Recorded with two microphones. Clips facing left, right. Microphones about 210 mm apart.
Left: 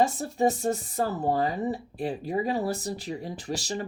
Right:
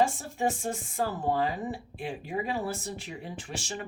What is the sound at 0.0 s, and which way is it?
Speech, 40° left (ahead or behind).